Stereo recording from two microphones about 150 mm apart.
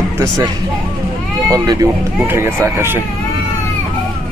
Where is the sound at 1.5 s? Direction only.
25° right (ahead or behind).